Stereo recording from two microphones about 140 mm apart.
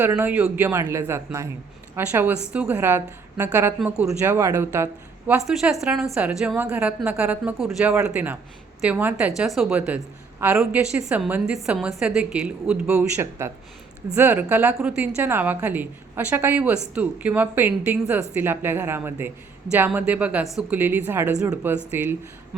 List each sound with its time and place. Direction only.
0.0 s a woman's voice: 20° right (ahead or behind)
5.4 s a woman's voice: 5° right (ahead or behind)
13.4 s a woman's voice: 20° right (ahead or behind)